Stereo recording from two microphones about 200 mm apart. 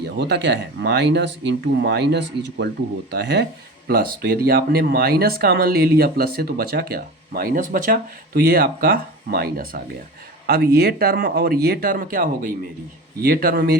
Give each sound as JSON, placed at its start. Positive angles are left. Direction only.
{"t": 0.0, "sound": "speech", "side_deg": -55}